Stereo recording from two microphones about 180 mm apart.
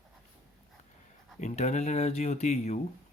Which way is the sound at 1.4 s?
40° left (ahead or behind).